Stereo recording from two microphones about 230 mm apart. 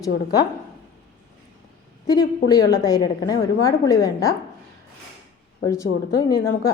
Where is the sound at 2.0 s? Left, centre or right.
Centre.